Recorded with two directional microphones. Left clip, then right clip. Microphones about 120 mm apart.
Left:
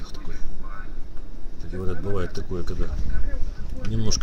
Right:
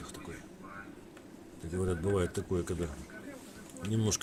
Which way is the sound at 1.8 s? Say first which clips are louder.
Left 2 dB; 5° right (ahead or behind).